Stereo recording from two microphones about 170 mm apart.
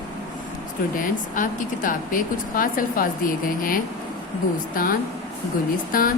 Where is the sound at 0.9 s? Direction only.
50° left (ahead or behind).